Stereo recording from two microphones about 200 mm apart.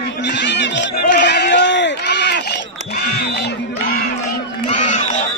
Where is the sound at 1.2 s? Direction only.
55° left (ahead or behind).